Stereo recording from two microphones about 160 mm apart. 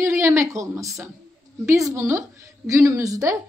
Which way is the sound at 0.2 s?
20° right (ahead or behind).